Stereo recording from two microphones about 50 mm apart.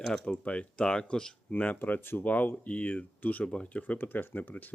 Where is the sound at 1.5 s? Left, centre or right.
Left.